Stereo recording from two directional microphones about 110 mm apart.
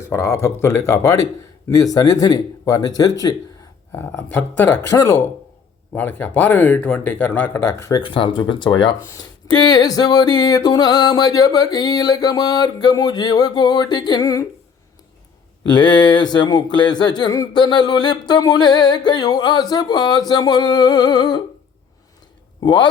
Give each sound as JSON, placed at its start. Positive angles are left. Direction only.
{"t": 0.0, "sound": "speech", "side_deg": 25}
{"t": 3.9, "sound": "speech", "side_deg": 20}
{"t": 5.9, "sound": "speech", "side_deg": 15}
{"t": 8.0, "sound": "speech", "side_deg": 50}
{"t": 15.7, "sound": "speech", "side_deg": 45}
{"t": 22.6, "sound": "speech", "side_deg": 45}